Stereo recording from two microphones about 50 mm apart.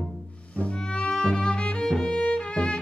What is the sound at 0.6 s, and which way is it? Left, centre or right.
Music, centre.